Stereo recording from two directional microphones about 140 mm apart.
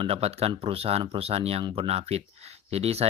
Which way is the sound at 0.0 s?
45° right (ahead or behind).